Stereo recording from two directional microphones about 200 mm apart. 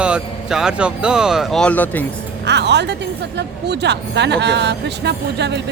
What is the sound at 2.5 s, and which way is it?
A woman's voice, 60° right (ahead or behind).